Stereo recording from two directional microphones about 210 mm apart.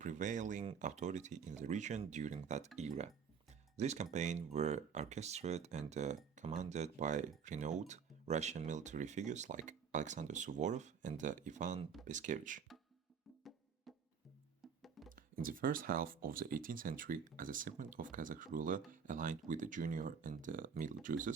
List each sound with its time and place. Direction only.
0.0 s speech: 35° right (ahead or behind)
13.9 s music: centre (ahead or behind)
15.1 s speech: 40° right (ahead or behind)